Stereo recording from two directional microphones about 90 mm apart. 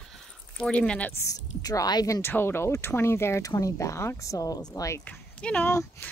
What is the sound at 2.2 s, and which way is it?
Speech, 25° left (ahead or behind).